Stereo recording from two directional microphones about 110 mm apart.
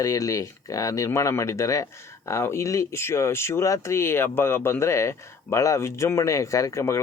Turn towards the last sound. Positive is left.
turn(degrees=25)  # may be behind; listen again after turning